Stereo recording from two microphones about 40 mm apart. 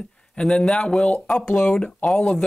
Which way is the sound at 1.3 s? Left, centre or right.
Centre.